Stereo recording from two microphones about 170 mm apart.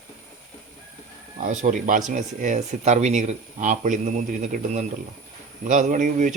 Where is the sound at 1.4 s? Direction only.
50° right (ahead or behind).